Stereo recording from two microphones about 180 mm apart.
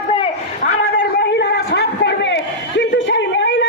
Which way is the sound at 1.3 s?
65° left (ahead or behind).